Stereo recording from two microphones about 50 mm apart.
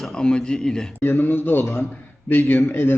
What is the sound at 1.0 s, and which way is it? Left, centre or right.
A man's voice, left.